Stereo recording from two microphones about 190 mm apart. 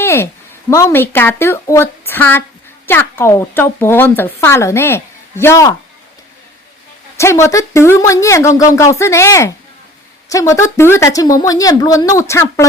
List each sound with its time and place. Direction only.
0.0 s a sound: 15° left (ahead or behind)
0.7 s a woman's voice: 15° left (ahead or behind)
7.2 s a woman's voice: 15° left (ahead or behind)